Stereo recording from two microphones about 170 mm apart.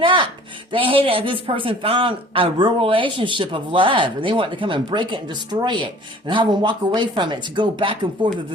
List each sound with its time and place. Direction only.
0.0 s music: 30° right (ahead or behind)
0.7 s a man's voice: 30° right (ahead or behind)